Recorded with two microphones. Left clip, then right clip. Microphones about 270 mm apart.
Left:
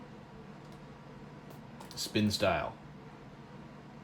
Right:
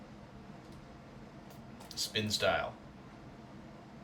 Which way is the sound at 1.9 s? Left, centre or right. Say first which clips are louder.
Left 1 dB; centre.